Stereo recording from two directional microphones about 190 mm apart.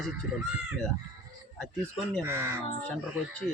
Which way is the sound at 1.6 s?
5° left (ahead or behind).